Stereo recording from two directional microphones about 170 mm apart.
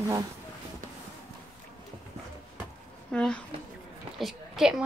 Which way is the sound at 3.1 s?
5° left (ahead or behind).